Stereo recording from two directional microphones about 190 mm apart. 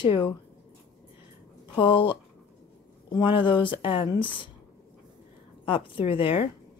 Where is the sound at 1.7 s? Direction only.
25° left (ahead or behind).